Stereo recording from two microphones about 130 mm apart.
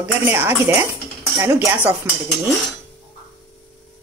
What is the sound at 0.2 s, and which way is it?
Speech, 15° right (ahead or behind).